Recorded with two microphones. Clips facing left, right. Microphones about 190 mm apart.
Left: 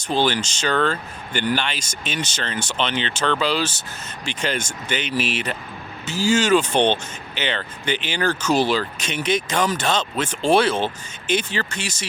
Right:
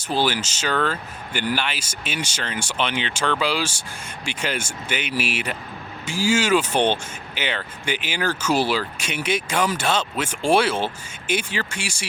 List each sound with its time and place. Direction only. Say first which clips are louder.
0.0 s speech: left 2 dB; 5° right (ahead or behind)